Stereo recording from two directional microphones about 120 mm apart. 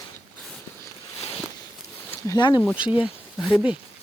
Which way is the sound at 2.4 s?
35° left (ahead or behind).